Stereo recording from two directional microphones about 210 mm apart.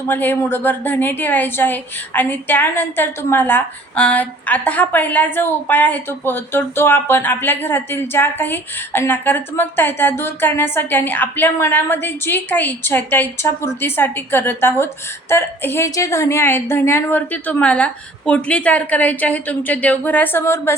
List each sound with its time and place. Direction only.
0.1 s a woman's voice: 10° left (ahead or behind)